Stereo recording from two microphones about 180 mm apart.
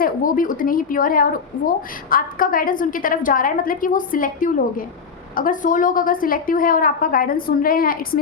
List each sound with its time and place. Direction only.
0.0 s a woman's voice: 50° left (ahead or behind)